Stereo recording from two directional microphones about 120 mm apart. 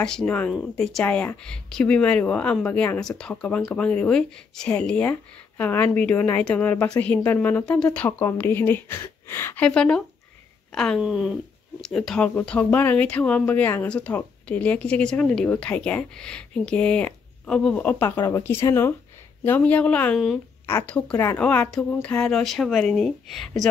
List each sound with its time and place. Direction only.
0.0 s speech: 5° left (ahead or behind)
9.7 s speech: 10° left (ahead or behind)
11.0 s speech: 5° right (ahead or behind)